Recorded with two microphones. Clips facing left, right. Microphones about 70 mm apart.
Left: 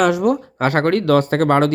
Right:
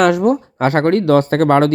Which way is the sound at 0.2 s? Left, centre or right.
Right.